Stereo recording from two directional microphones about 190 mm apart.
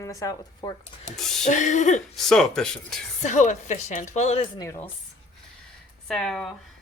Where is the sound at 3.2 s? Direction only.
40° left (ahead or behind).